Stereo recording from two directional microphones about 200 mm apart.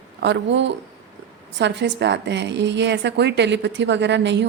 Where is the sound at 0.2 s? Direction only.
60° right (ahead or behind).